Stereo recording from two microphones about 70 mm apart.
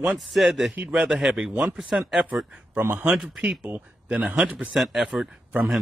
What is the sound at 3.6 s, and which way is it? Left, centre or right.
Speech, right.